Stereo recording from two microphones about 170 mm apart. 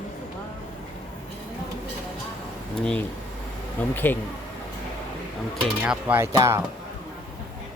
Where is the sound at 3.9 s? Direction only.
10° left (ahead or behind).